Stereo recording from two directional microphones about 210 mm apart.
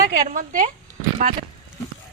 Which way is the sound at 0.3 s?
40° right (ahead or behind).